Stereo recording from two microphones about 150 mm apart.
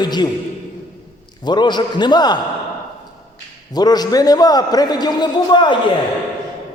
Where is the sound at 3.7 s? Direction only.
25° left (ahead or behind).